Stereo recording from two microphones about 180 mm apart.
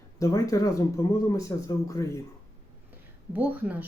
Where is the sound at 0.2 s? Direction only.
20° left (ahead or behind).